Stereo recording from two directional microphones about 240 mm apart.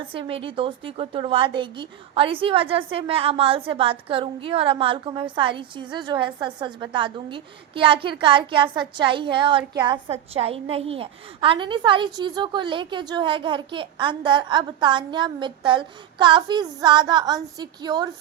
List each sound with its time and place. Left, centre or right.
0.1 s a woman's voice: right